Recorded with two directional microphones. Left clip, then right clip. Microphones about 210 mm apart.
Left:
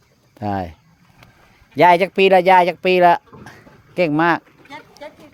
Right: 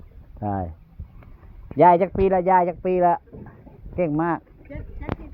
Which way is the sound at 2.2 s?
70° left (ahead or behind).